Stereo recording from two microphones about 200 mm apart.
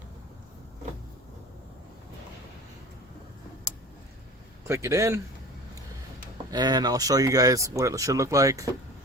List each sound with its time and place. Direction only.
4.6 s speech: 15° right (ahead or behind)
6.5 s speech: 20° right (ahead or behind)